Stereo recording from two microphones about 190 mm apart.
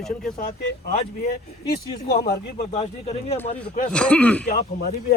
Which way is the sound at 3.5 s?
45° left (ahead or behind).